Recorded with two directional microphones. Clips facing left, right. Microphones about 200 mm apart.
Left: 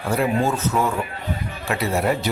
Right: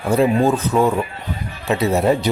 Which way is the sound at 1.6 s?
20° right (ahead or behind).